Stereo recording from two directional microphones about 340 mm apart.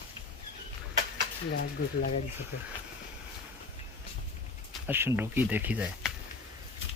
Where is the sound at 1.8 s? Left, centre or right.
Left.